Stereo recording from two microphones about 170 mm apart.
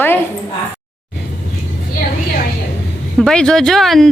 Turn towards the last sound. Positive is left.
turn(degrees=0)  # may be behind; listen again after turning